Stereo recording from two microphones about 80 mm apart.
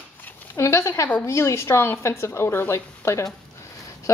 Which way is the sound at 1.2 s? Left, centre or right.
Left.